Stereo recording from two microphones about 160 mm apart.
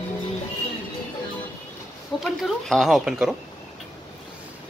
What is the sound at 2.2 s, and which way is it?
Speech, centre (ahead or behind).